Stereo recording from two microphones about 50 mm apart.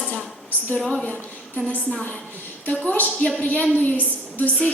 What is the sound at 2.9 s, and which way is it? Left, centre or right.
A woman's voice, left.